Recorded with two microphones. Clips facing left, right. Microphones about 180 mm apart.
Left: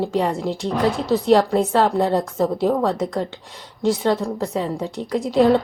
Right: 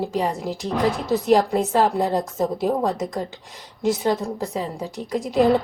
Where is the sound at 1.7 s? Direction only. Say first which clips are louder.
Left 2 dB; 20° right (ahead or behind).